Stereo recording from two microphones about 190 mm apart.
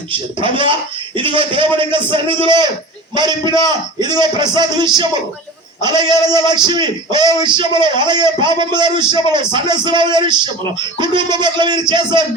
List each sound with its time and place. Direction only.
0.1 s a man's voice: 25° right (ahead or behind)